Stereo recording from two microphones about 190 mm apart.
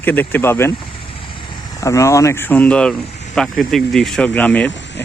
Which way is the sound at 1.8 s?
15° left (ahead or behind).